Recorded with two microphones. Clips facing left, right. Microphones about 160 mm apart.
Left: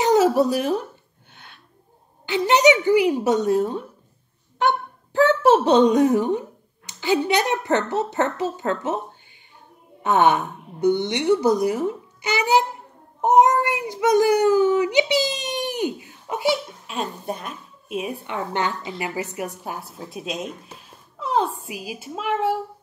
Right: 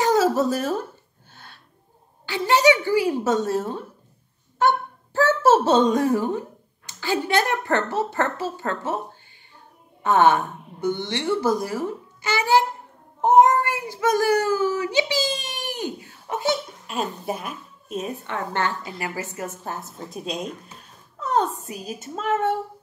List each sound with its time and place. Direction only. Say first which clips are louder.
0.0 s a sound: left 2 dB; 20° left (ahead or behind)
2.2 s a child's voice: left 2 dB; 20° left (ahead or behind)
5.2 s a woman's voice: left 2 dB; 15° left (ahead or behind)
10.0 s a child's voice: even; 20° left (ahead or behind)
16.8 s a woman's voice: right 1 dB; centre (ahead or behind)
17.9 s a woman's voice: left 1 dB; 10° left (ahead or behind)
19.9 s a woman's voice: even; centre (ahead or behind)